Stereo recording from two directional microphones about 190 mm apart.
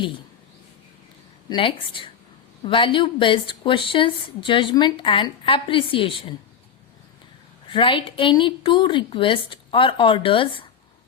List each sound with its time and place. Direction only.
1.5 s a woman's voice: 25° left (ahead or behind)
7.7 s a woman's voice: 25° left (ahead or behind)